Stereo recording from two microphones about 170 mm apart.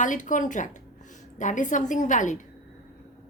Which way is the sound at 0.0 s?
50° left (ahead or behind).